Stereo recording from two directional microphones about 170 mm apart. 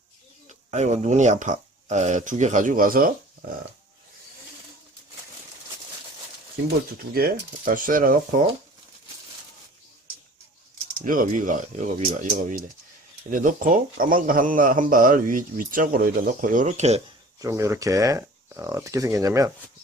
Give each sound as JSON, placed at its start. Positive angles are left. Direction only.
{"t": 0.4, "sound": "speech", "side_deg": -45}
{"t": 6.9, "sound": "speech", "side_deg": -60}
{"t": 11.0, "sound": "speech", "side_deg": -55}
{"t": 17.4, "sound": "speech", "side_deg": -20}